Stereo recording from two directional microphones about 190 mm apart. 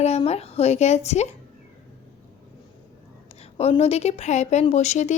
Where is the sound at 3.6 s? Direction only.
35° left (ahead or behind).